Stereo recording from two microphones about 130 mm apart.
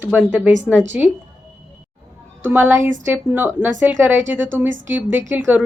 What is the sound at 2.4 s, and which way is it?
Speech, 15° right (ahead or behind).